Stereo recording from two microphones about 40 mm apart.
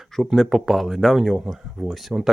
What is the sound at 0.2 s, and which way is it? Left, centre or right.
Speech, centre.